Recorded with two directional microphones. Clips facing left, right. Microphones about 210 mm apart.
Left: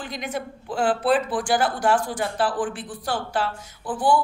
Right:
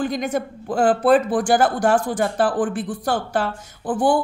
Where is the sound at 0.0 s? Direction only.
45° right (ahead or behind).